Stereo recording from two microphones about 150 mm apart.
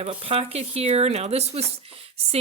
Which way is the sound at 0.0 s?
40° right (ahead or behind).